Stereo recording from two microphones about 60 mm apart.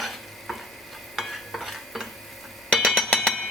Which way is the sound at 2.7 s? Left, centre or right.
Centre.